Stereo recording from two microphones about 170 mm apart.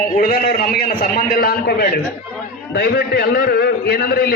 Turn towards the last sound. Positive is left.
turn(degrees=70)  # may be behind; listen again after turning